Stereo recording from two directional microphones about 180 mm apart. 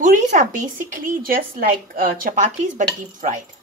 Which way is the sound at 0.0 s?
45° right (ahead or behind).